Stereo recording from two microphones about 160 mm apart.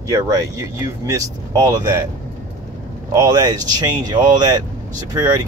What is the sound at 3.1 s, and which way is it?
Speech, 20° right (ahead or behind).